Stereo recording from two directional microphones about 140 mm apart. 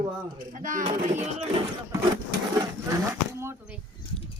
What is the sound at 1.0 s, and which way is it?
Speech, 55° right (ahead or behind).